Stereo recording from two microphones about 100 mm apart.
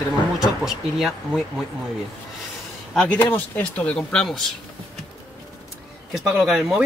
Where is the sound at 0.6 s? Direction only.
5° right (ahead or behind).